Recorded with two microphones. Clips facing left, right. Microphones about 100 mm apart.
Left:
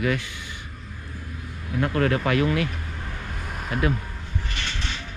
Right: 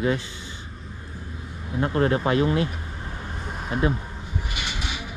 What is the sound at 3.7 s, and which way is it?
Speech, 20° right (ahead or behind).